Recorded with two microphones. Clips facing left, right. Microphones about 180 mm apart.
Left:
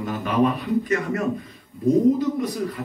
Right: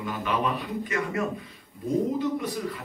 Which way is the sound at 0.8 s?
45° left (ahead or behind).